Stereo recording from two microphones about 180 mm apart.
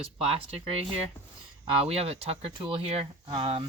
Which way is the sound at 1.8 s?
35° right (ahead or behind).